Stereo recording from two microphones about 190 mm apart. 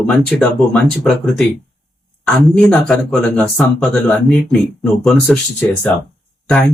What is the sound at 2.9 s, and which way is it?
Speech, 5° left (ahead or behind).